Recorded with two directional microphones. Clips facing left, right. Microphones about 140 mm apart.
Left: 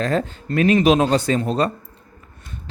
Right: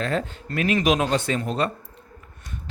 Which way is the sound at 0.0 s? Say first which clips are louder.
Left 4 dB; 40° left (ahead or behind).